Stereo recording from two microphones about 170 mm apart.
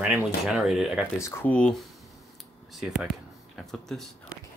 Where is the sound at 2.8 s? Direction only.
5° right (ahead or behind).